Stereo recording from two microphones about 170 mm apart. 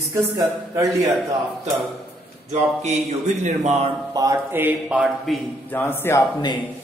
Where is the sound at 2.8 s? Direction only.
40° right (ahead or behind).